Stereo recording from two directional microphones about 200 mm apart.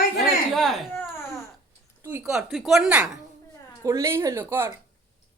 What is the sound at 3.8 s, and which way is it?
Speech, 15° right (ahead or behind).